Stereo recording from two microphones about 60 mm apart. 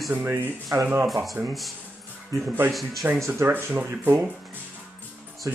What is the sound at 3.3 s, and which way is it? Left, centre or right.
Speech, right.